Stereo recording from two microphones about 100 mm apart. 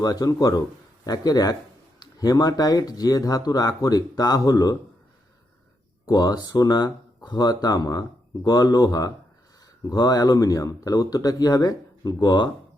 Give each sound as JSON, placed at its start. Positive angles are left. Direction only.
{"t": 0.0, "sound": "speech", "side_deg": 40}
{"t": 6.1, "sound": "speech", "side_deg": 40}